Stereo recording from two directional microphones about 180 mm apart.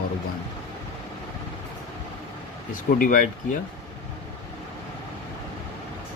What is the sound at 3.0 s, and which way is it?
Speech, 50° left (ahead or behind).